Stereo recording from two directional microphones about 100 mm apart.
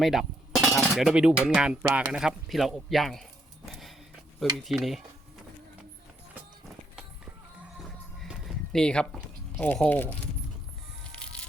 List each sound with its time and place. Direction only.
0.0 s cutlery: centre (ahead or behind)
0.8 s speech: 5° right (ahead or behind)
3.7 s a sound: centre (ahead or behind)
4.5 s speech: centre (ahead or behind)
7.8 s a sound: centre (ahead or behind)
9.5 s speech: 15° left (ahead or behind)
11.0 s music: 10° left (ahead or behind)